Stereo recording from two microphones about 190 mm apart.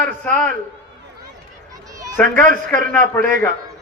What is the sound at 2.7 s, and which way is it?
Speech, 10° left (ahead or behind).